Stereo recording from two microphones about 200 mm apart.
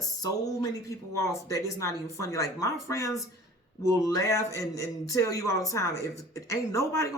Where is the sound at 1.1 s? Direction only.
15° left (ahead or behind).